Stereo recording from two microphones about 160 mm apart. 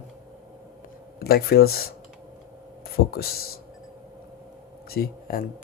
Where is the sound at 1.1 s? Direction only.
75° left (ahead or behind).